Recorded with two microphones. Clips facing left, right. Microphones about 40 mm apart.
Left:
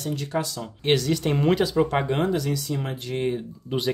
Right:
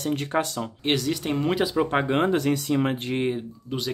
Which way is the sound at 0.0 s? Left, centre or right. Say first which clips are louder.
Right 2 dB; right.